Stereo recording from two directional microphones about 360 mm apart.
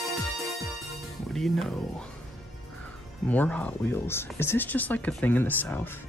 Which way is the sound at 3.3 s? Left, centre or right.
Centre.